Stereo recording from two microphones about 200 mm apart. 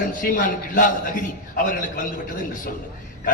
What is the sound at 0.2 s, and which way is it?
A man's voice, 45° left (ahead or behind).